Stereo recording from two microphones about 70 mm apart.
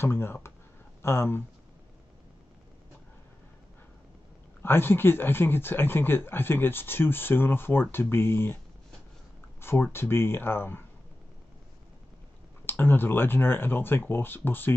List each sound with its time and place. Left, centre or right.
0.0 s speech: left
4.6 s speech: left
9.6 s a sound: left
9.9 s speech: left
12.6 s speech: left